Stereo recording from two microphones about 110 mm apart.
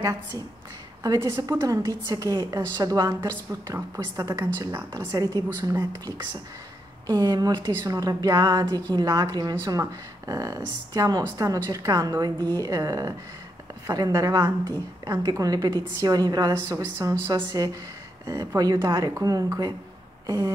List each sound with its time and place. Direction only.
0.0 s a woman's voice: 30° right (ahead or behind)
1.5 s a woman's voice: 25° right (ahead or behind)
1.9 s a woman's voice: 35° right (ahead or behind)
20.2 s a sound: 35° right (ahead or behind)